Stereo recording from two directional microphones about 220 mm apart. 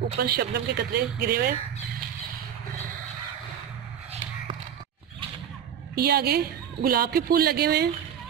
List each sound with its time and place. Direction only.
0.2 s a woman's voice: 45° right (ahead or behind)
5.9 s a woman's voice: 45° right (ahead or behind)